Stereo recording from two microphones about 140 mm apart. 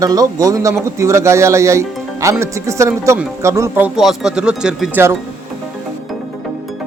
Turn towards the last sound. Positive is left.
turn(degrees=-5)  # may be behind; listen again after turning